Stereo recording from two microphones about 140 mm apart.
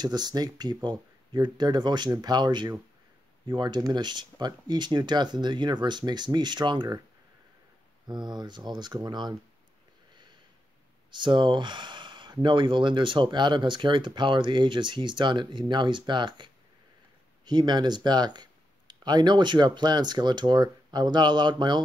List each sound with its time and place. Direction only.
0.0 s speech: 30° right (ahead or behind)
8.1 s speech: 30° right (ahead or behind)
11.1 s speech: 35° right (ahead or behind)
17.5 s speech: 30° right (ahead or behind)